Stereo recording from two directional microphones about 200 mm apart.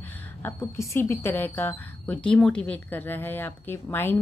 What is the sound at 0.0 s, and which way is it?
A woman's voice, 10° left (ahead or behind).